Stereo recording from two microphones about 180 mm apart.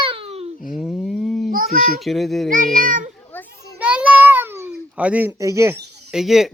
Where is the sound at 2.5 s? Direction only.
50° right (ahead or behind).